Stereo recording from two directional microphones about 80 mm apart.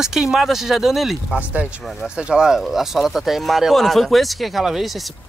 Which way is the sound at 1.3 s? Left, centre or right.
Centre.